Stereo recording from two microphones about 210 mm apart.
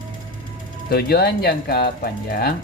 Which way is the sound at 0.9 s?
45° left (ahead or behind).